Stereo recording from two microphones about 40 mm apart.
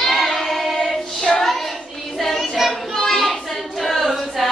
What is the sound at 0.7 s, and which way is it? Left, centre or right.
Choir, centre.